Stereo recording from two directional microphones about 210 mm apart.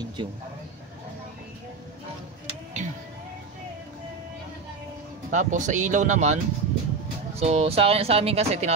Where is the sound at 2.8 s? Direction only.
35° right (ahead or behind).